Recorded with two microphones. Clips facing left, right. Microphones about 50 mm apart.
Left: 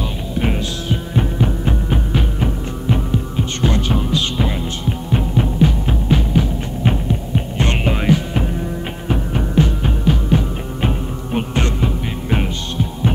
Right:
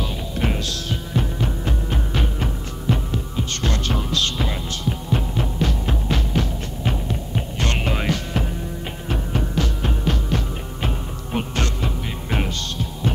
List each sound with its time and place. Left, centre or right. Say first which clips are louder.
0.0 s music: left 4 dB; centre
6.8 s throbbing: left 6 dB; centre
9.1 s music: left 6 dB; centre